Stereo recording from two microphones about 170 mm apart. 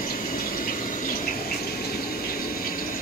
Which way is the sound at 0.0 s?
55° left (ahead or behind).